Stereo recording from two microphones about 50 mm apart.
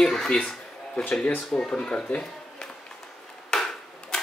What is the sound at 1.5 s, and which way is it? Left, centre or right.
Speech, centre.